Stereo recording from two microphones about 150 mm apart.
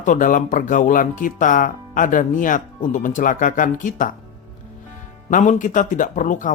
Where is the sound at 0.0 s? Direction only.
60° left (ahead or behind).